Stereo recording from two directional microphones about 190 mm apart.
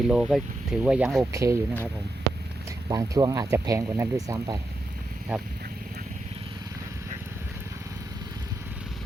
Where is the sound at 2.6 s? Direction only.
15° right (ahead or behind).